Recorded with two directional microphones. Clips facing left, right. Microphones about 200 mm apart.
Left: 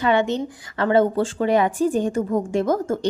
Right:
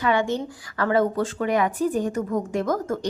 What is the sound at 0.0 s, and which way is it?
A woman's voice, 25° left (ahead or behind).